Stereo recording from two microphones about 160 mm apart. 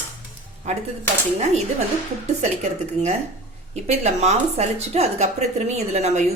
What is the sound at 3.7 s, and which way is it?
A woman's voice, 45° right (ahead or behind).